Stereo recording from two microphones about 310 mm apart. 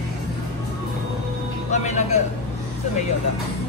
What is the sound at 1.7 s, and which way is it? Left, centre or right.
Speech, left.